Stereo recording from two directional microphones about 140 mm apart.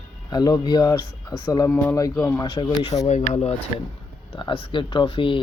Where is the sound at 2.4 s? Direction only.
35° left (ahead or behind).